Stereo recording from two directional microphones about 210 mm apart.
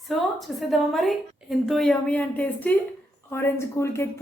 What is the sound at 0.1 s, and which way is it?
A woman's voice, centre (ahead or behind).